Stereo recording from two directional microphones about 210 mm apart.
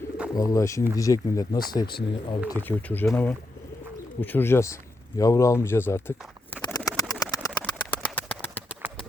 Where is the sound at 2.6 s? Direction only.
10° left (ahead or behind).